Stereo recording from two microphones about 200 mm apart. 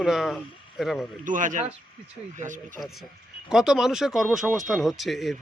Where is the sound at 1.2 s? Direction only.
40° right (ahead or behind).